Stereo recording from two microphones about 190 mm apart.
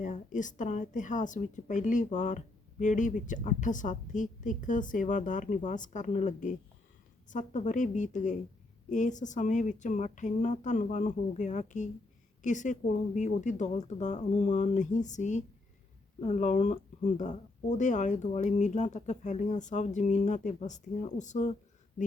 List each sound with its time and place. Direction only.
0.0 s a woman's voice: 40° left (ahead or behind)